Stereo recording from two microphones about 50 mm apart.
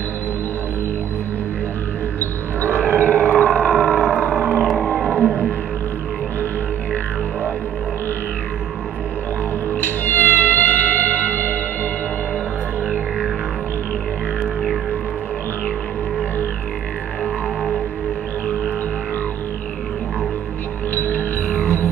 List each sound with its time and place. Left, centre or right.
2.1 s a sound: left
5.0 s music: left
9.7 s music: left
21.0 s music: left